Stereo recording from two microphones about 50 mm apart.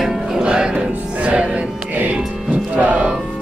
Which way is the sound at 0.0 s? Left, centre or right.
Centre.